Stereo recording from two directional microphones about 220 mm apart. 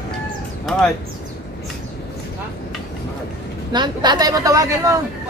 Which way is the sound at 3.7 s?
20° right (ahead or behind).